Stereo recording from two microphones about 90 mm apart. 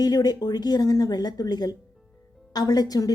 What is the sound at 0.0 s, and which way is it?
A woman's voice, 45° left (ahead or behind).